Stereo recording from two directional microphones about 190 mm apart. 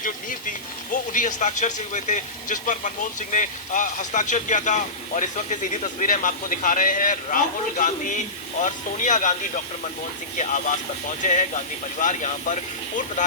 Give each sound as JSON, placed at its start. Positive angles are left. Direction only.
{"t": 0.0, "sound": "a man's voice", "side_deg": 45}
{"t": 10.3, "sound": "a man's voice", "side_deg": 40}